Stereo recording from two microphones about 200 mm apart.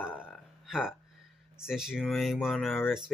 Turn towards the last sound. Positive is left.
turn(degrees=0)  # may be behind; listen again after turning